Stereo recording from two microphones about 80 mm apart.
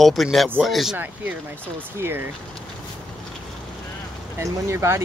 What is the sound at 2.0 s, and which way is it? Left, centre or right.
Speech, right.